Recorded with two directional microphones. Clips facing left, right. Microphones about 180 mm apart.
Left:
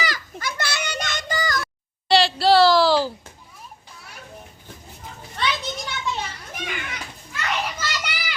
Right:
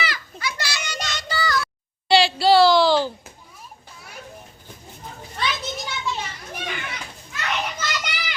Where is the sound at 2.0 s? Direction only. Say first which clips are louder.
Even; centre (ahead or behind).